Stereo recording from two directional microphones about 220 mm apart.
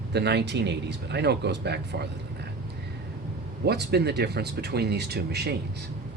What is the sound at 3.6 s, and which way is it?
Speech, 50° right (ahead or behind).